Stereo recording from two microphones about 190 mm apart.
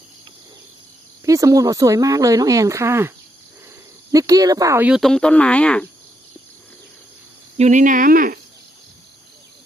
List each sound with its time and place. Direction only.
1.2 s speech: 15° right (ahead or behind)
4.1 s speech: 20° right (ahead or behind); by 5.9 s 5° left (ahead or behind)
7.5 s speech: 40° right (ahead or behind)